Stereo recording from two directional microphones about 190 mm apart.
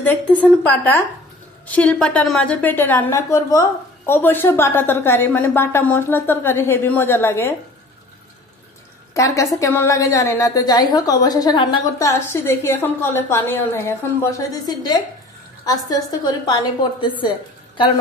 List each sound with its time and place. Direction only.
0.0 s a woman's voice: 10° left (ahead or behind)
9.1 s a woman's voice: 15° left (ahead or behind)